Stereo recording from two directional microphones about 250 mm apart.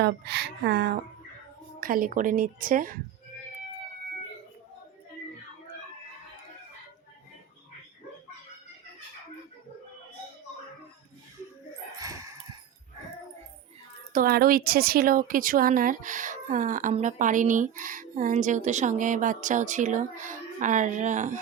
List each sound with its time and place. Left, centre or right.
0.0 s a woman's voice: right
11.9 s a sound: centre
14.1 s a woman's voice: right